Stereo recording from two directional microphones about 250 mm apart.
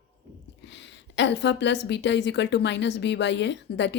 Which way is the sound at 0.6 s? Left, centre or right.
Left.